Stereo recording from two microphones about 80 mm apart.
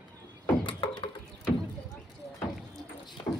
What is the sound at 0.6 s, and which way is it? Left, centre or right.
Beatboxing, left.